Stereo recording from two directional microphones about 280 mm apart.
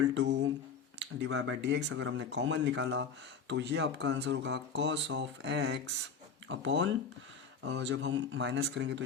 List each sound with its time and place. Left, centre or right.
0.1 s speech: right